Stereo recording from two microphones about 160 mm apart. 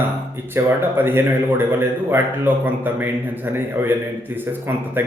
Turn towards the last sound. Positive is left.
turn(degrees=-10)  # may be behind; listen again after turning